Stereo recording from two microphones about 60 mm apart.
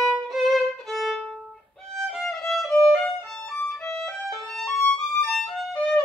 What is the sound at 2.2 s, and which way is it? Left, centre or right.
Violin, centre.